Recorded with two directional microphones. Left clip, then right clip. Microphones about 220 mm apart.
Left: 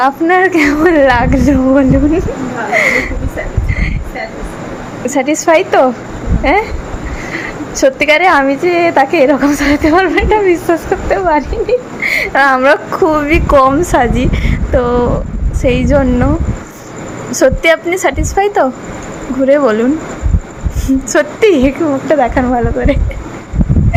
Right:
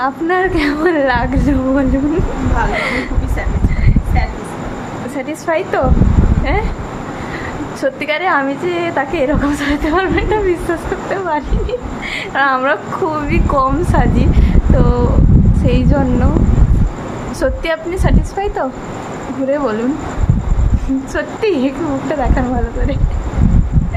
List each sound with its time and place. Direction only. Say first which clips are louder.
0.0 s a woman's voice: left 6 dB; 15° left (ahead or behind)
5.1 s a woman's voice: left 9 dB; 25° left (ahead or behind)
7.8 s a woman's voice: left 9 dB; 20° left (ahead or behind)
17.4 s a woman's voice: left 8 dB; 20° left (ahead or behind)
21.1 s a woman's voice: left 8 dB; 20° left (ahead or behind)